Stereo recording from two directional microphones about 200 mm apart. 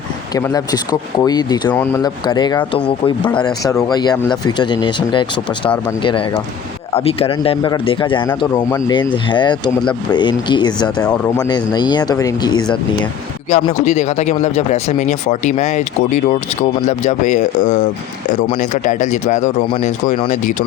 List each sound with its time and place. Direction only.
0.3 s speech: 15° left (ahead or behind)
2.8 s a man's voice: 5° left (ahead or behind)
13.5 s speech: 35° left (ahead or behind)